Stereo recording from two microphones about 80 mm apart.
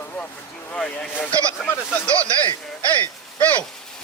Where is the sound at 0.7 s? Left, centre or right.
Centre.